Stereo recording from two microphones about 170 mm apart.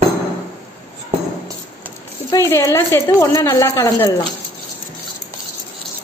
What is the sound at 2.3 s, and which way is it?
A woman's voice, 20° left (ahead or behind).